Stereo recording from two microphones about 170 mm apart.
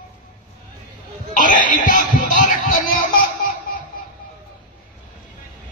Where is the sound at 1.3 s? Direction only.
50° left (ahead or behind).